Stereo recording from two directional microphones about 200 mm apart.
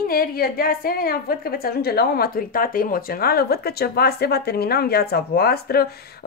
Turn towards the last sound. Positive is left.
turn(degrees=50)  # may be behind; listen again after turning